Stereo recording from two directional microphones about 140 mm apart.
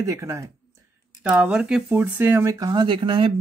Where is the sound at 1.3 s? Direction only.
5° right (ahead or behind).